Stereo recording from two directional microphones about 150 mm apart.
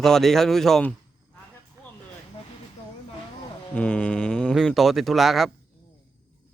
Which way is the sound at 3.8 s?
10° left (ahead or behind).